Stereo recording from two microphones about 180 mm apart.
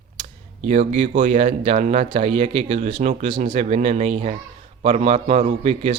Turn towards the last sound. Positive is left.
turn(degrees=-35)  # may be behind; listen again after turning